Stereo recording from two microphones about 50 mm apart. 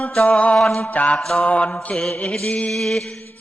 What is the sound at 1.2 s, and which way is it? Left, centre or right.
Mantra, centre.